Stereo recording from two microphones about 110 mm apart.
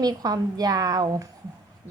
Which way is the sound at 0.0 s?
35° right (ahead or behind).